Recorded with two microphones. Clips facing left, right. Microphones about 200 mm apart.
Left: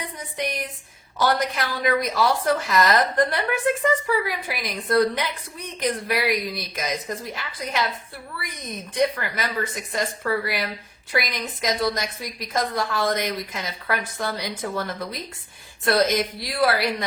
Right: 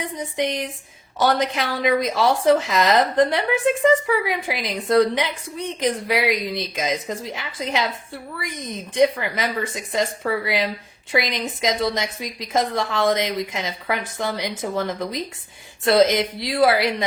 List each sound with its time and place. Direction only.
0.3 s a woman's voice: 25° right (ahead or behind)